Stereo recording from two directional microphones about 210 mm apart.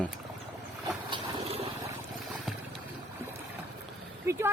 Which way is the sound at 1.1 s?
25° right (ahead or behind).